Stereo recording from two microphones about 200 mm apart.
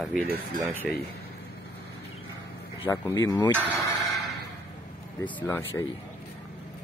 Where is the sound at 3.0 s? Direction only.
15° left (ahead or behind).